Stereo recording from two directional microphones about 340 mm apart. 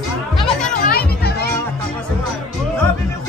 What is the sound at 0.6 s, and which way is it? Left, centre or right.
Music, left.